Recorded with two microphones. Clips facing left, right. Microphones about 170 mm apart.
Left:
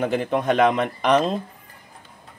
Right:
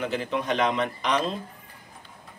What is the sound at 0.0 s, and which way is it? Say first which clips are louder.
A man's voice: left 6 dB; 50° left (ahead or behind).